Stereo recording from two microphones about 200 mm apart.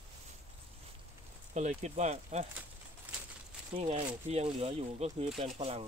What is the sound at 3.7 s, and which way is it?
Speech, 35° right (ahead or behind).